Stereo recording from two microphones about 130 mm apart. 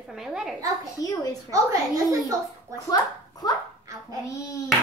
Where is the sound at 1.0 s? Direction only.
30° left (ahead or behind).